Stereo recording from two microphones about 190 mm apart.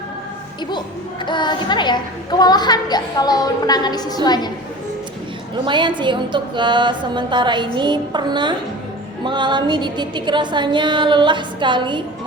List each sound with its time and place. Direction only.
1.2 s a woman's voice: 25° left (ahead or behind)
5.6 s a woman's voice: 25° right (ahead or behind)